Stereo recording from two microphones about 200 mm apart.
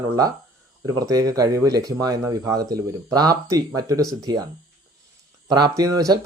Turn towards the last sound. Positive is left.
turn(degrees=-15)  # may be behind; listen again after turning